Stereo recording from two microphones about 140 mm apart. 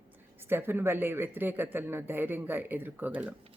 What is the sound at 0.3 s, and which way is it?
Speech, 15° right (ahead or behind).